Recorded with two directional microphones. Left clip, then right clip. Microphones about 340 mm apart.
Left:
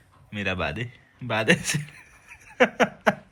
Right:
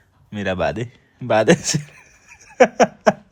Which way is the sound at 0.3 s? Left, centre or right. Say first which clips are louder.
Right 6 dB; centre.